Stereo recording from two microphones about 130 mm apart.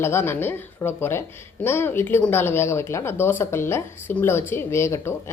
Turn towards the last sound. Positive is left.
turn(degrees=20)  # may be behind; listen again after turning